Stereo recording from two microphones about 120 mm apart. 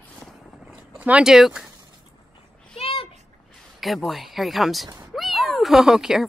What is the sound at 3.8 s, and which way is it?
Speech, centre (ahead or behind).